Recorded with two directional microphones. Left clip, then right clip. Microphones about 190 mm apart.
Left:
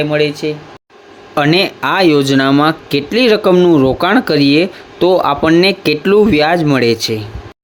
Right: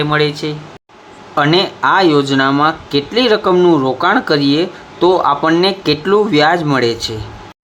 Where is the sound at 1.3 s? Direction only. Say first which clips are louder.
Left 1 dB; 40° left (ahead or behind).